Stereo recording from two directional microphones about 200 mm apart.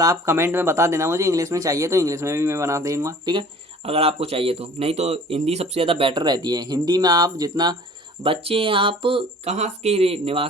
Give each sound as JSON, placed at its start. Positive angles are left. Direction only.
{"t": 0.0, "sound": "speech", "side_deg": -15}
{"t": 3.8, "sound": "speech", "side_deg": -30}